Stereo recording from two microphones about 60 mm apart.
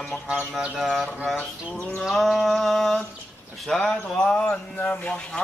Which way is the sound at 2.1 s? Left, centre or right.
Centre.